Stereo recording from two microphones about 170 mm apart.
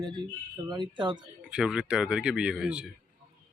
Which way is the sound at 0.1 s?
25° right (ahead or behind).